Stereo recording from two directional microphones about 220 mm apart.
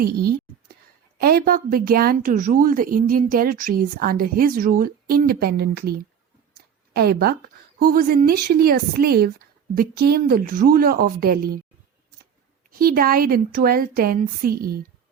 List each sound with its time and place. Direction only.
1.2 s speech: 45° right (ahead or behind)
6.9 s a woman's voice: 45° right (ahead or behind)
12.8 s speech: 40° right (ahead or behind)